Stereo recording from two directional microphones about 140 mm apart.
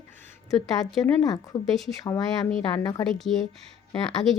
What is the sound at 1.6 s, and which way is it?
Speech, centre (ahead or behind).